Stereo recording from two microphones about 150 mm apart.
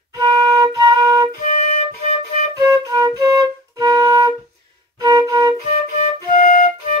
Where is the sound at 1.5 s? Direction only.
55° left (ahead or behind).